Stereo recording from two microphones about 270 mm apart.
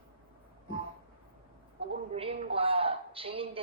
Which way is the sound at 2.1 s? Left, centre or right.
Right.